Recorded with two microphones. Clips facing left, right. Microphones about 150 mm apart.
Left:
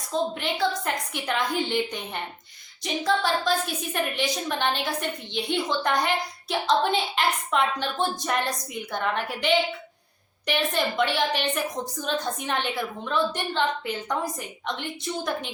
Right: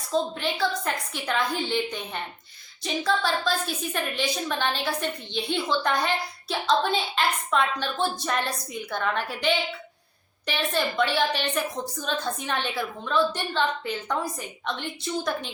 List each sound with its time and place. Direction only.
0.1 s a woman's voice: 15° left (ahead or behind)